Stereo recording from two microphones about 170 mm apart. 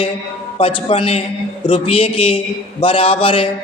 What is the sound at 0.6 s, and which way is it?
A man's voice, 35° left (ahead or behind).